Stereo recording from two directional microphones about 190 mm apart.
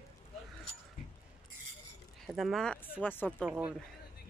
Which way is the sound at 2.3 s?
Centre (ahead or behind).